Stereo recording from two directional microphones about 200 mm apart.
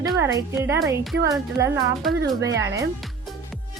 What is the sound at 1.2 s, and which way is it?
Speech, 15° right (ahead or behind).